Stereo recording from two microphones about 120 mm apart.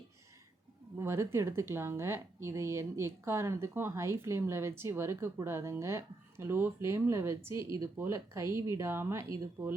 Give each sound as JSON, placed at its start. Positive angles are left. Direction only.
{"t": 0.9, "sound": "speech", "side_deg": -20}